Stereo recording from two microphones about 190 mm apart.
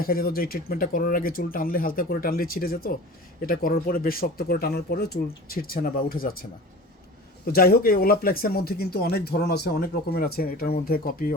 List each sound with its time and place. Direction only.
0.0 s speech: 50° left (ahead or behind)